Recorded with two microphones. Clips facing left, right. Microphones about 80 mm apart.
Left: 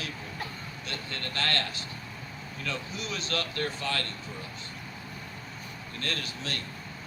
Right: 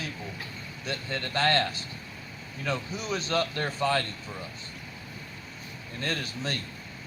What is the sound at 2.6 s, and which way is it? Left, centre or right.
Speech, right.